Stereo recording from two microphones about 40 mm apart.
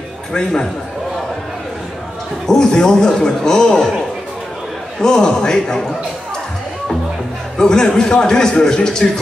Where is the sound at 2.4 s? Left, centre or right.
Centre.